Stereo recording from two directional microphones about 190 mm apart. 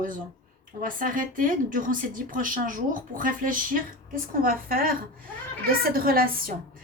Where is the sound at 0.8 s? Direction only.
45° right (ahead or behind).